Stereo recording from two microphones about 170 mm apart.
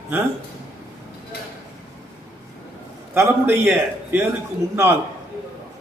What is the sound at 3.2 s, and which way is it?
A man's voice, 15° right (ahead or behind).